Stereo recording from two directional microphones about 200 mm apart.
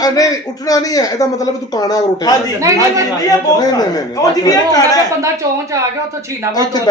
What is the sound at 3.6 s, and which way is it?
A man's voice, 20° left (ahead or behind).